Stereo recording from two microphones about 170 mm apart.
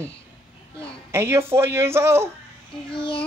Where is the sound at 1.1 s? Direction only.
15° right (ahead or behind).